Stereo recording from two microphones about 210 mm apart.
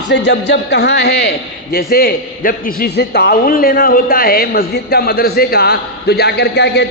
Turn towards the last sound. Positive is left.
turn(degrees=55)  # may be behind; listen again after turning